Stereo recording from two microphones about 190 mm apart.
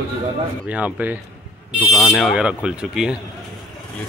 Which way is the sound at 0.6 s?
10° right (ahead or behind).